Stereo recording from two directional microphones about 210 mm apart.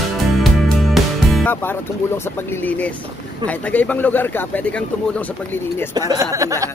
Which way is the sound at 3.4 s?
5° left (ahead or behind).